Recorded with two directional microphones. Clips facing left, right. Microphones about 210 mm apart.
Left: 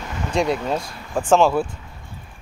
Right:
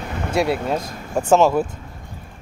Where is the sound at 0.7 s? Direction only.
40° right (ahead or behind).